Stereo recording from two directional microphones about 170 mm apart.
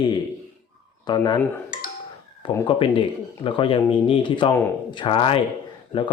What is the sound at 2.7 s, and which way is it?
Speech, 30° left (ahead or behind).